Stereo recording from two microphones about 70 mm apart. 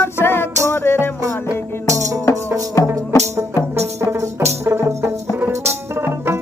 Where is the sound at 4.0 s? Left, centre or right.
Right.